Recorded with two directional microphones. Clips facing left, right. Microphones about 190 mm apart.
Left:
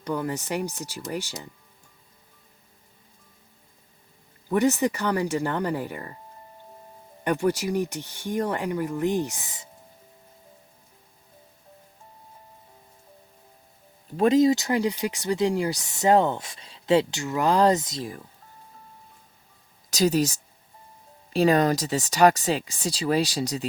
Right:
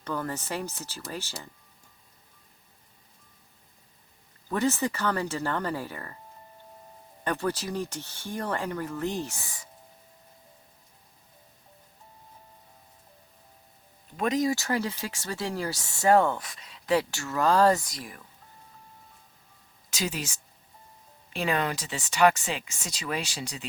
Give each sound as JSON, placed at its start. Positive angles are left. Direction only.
{"t": 0.0, "sound": "speech", "side_deg": 15}
{"t": 4.4, "sound": "speech", "side_deg": 15}
{"t": 7.3, "sound": "speech", "side_deg": 15}
{"t": 14.2, "sound": "speech", "side_deg": 30}
{"t": 19.9, "sound": "speech", "side_deg": 40}